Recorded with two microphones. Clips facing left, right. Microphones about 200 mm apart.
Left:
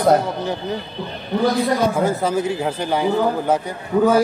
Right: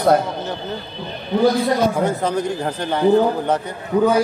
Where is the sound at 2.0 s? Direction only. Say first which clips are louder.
Left 1 dB; 5° left (ahead or behind).